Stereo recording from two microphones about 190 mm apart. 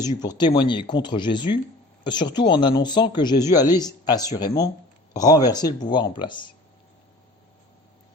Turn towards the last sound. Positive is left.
turn(degrees=25)  # may be behind; listen again after turning